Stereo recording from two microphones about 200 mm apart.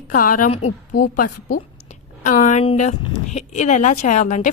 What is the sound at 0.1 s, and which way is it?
A woman's voice, 45° left (ahead or behind).